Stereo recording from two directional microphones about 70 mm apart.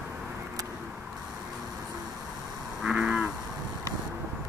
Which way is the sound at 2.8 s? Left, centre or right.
Centre.